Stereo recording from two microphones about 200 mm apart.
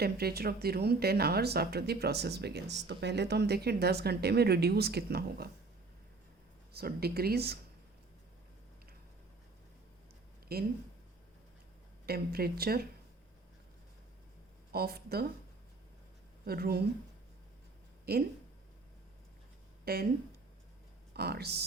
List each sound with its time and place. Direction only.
0.0 s speech: 50° right (ahead or behind)
6.7 s speech: 50° right (ahead or behind)
10.5 s speech: 50° right (ahead or behind)
12.0 s speech: 50° right (ahead or behind)
14.7 s speech: 50° right (ahead or behind)
16.5 s speech: 50° right (ahead or behind)
18.1 s speech: 50° right (ahead or behind)
19.8 s speech: 50° right (ahead or behind)
21.1 s speech: 55° right (ahead or behind)